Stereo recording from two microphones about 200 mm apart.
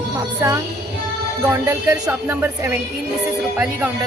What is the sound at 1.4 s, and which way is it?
Speech, 15° right (ahead or behind).